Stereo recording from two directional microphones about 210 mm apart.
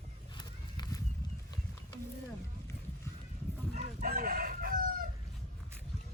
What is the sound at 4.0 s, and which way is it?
Chicken, 45° right (ahead or behind).